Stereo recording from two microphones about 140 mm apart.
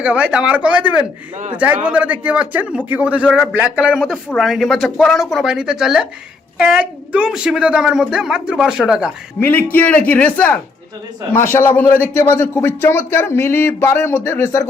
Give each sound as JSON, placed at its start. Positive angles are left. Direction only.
{"t": 0.0, "sound": "a man's voice", "side_deg": -10}
{"t": 9.4, "sound": "speech", "side_deg": 15}